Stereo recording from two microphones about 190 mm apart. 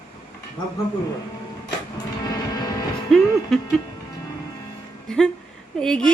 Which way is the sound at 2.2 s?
20° left (ahead or behind).